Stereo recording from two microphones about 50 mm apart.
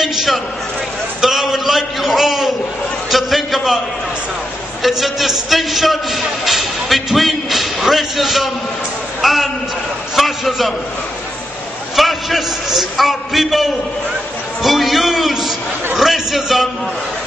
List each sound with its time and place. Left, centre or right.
0.0 s a sound: centre
4.8 s a man's voice: centre
11.9 s a man's voice: centre